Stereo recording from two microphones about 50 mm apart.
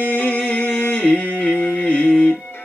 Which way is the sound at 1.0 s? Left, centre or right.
Left.